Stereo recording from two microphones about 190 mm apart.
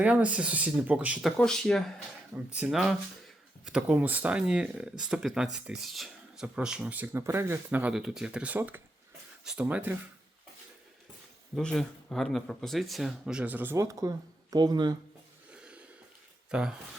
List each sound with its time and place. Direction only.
0.0 s speech: 5° right (ahead or behind)
11.5 s speech: centre (ahead or behind); by 14.9 s 20° right (ahead or behind)
16.5 s speech: 5° right (ahead or behind)